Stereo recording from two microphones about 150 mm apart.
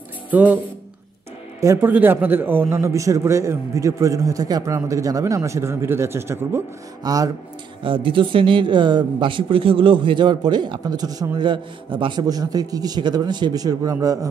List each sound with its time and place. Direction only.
0.3 s speech: 10° right (ahead or behind)
1.6 s a man's voice: 15° right (ahead or behind)
7.8 s speech: 35° right (ahead or behind)